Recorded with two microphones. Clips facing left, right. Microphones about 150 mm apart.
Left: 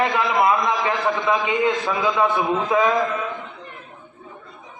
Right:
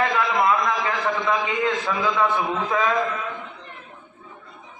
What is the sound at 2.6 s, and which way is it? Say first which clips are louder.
Speech: left 4 dB; 20° left (ahead or behind).